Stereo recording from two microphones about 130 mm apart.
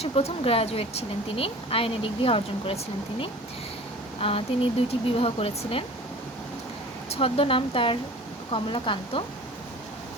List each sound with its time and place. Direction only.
0.0 s speech: 50° left (ahead or behind)
7.1 s speech: 50° left (ahead or behind)